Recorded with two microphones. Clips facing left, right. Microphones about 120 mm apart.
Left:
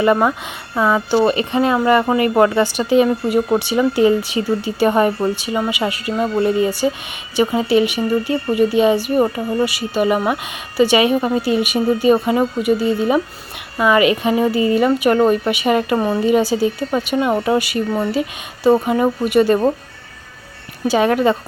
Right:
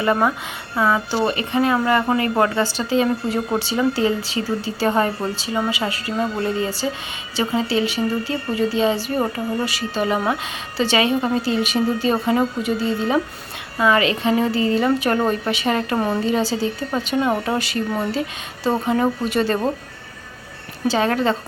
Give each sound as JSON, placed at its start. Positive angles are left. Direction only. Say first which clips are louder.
{"t": 0.0, "sound": "speech", "louder": "left 4 dB", "side_deg": 20}
{"t": 20.8, "sound": "speech", "louder": "left 4 dB", "side_deg": 15}